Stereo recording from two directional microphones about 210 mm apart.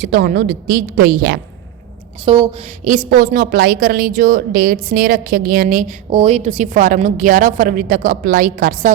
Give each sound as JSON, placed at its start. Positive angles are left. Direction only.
{"t": 0.0, "sound": "a woman's voice", "side_deg": -45}
{"t": 2.2, "sound": "a woman's voice", "side_deg": -25}
{"t": 2.8, "sound": "a woman's voice", "side_deg": -40}
{"t": 6.1, "sound": "a woman's voice", "side_deg": -30}